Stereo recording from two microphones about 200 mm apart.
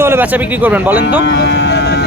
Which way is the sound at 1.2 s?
55° left (ahead or behind).